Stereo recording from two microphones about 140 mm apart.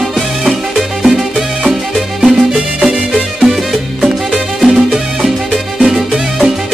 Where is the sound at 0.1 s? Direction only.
5° right (ahead or behind).